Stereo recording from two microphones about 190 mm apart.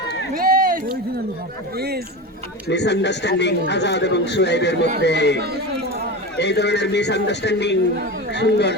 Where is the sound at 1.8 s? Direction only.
55° right (ahead or behind).